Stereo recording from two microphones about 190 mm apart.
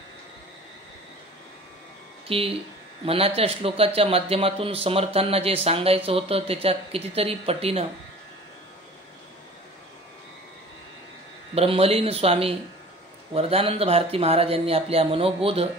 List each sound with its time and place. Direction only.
2.2 s speech: 30° right (ahead or behind)
11.5 s speech: 30° right (ahead or behind)